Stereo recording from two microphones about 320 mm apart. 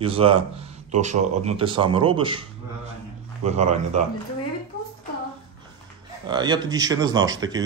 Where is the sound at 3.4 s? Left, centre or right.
Right.